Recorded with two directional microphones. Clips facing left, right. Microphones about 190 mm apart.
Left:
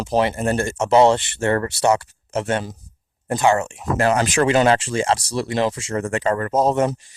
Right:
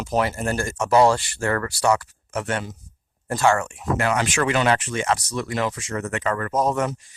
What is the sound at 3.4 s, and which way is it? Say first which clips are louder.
Speech: left 2 dB; 20° left (ahead or behind).